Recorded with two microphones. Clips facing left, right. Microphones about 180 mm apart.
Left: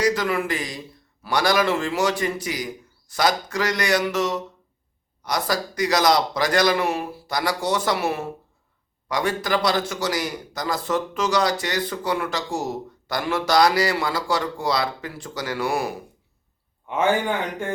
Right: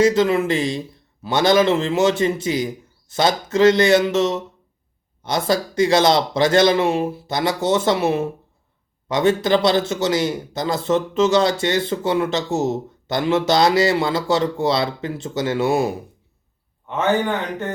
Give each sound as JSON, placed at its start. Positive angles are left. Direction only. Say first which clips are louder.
{"t": 0.0, "sound": "speech", "louder": "right 6 dB", "side_deg": -25}
{"t": 16.9, "sound": "speech", "louder": "right 2 dB", "side_deg": 10}